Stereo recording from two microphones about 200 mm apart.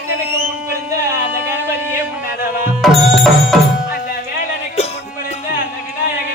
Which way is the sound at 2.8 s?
Centre (ahead or behind).